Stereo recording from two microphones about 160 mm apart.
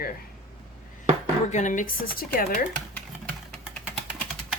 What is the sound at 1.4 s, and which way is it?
A woman's voice, 50° left (ahead or behind).